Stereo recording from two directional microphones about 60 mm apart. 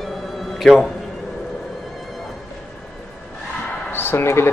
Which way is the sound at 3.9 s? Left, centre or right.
Left.